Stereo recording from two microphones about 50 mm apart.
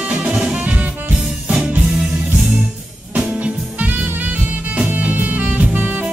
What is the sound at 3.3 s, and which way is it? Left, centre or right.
Music, right.